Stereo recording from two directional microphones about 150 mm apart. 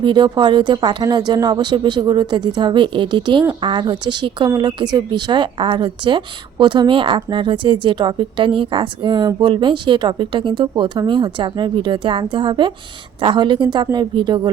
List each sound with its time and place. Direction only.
0.0 s speech: 30° right (ahead or behind)